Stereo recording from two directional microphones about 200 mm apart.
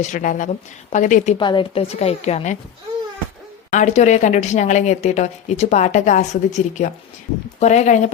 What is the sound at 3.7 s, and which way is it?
A woman's voice, 35° left (ahead or behind).